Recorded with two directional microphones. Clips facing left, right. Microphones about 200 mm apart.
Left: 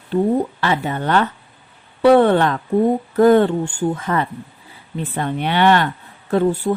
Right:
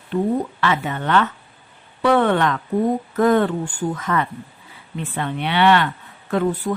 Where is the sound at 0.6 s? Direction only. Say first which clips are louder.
Left 2 dB; 35° left (ahead or behind).